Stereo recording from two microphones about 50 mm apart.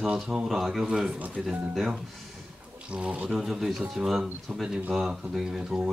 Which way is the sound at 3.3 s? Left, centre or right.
Centre.